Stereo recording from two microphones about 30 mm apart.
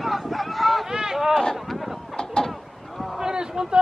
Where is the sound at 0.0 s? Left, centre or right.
Centre.